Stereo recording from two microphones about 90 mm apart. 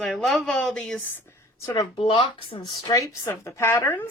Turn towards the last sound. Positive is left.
turn(degrees=25)  # may be behind; listen again after turning